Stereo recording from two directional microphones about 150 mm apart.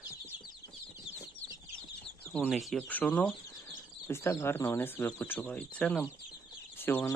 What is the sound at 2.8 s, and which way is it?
Speech, 10° left (ahead or behind).